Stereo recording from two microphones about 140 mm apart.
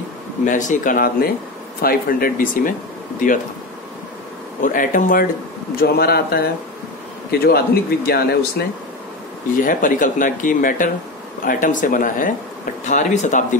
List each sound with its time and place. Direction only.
0.5 s speech: 65° left (ahead or behind)
4.6 s speech: 75° left (ahead or behind)
5.8 s speech: 90° left
9.6 s speech: 70° left (ahead or behind)
12.8 s speech: 60° left (ahead or behind)